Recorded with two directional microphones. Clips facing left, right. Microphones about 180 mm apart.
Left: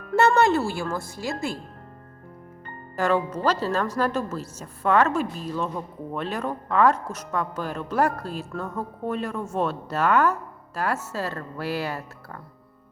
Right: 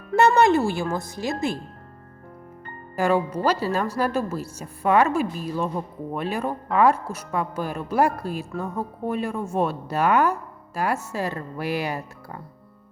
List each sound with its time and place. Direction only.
0.2 s speech: 15° right (ahead or behind)
2.9 s speech: 10° right (ahead or behind)